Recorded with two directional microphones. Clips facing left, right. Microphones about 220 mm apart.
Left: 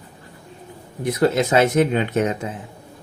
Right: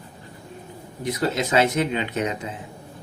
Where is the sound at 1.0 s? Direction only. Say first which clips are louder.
Left 6 dB; 50° left (ahead or behind).